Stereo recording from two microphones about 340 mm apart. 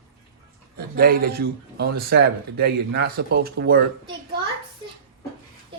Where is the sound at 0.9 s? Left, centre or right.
Right.